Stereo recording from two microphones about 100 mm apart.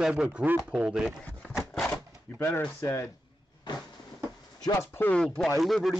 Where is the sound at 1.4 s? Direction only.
Centre (ahead or behind).